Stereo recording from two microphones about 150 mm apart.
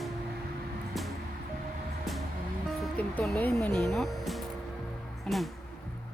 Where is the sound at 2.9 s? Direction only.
10° left (ahead or behind).